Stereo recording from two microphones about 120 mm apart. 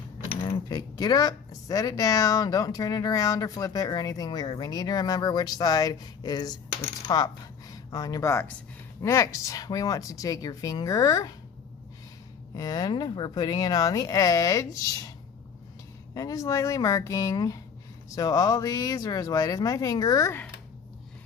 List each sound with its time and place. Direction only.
0.4 s speech: 35° left (ahead or behind)
12.5 s speech: 30° left (ahead or behind)
16.1 s speech: 30° left (ahead or behind)